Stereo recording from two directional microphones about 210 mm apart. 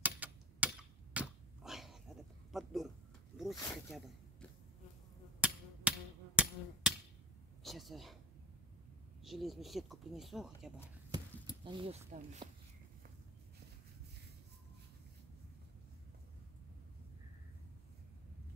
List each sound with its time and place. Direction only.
0.0 s a sound: 5° right (ahead or behind)
1.6 s dog: centre (ahead or behind)
2.5 s speech: centre (ahead or behind)
3.3 s snake: centre (ahead or behind)
5.4 s a sound: 5° right (ahead or behind)
7.6 s speech: centre (ahead or behind)
9.2 s speech: centre (ahead or behind)
11.6 s speech: 25° right (ahead or behind)